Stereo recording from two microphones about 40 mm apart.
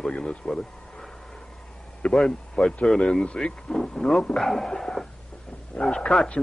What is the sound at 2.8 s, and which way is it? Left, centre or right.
Speech, centre.